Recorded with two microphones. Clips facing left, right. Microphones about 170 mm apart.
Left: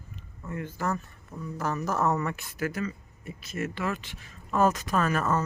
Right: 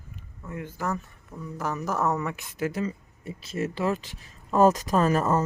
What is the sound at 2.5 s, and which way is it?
Speech, 25° right (ahead or behind).